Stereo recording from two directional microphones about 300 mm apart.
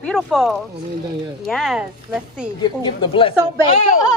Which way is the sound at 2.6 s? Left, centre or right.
Centre.